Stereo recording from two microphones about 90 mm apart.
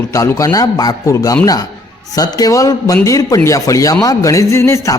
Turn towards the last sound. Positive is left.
turn(degrees=35)  # may be behind; listen again after turning